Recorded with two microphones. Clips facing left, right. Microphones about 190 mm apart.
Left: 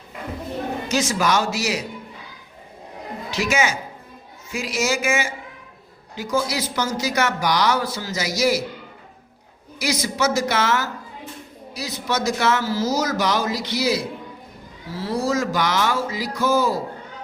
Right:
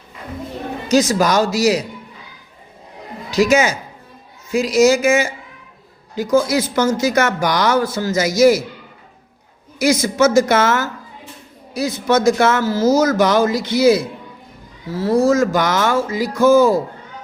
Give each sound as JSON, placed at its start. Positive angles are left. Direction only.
{"t": 0.9, "sound": "speech", "side_deg": -40}
{"t": 3.3, "sound": "speech", "side_deg": -40}
{"t": 6.3, "sound": "speech", "side_deg": -50}
{"t": 9.7, "sound": "speech", "side_deg": -50}